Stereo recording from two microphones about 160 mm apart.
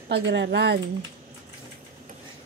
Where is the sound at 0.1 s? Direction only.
90° right.